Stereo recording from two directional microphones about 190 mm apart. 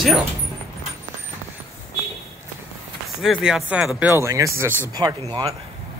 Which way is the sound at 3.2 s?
Centre (ahead or behind).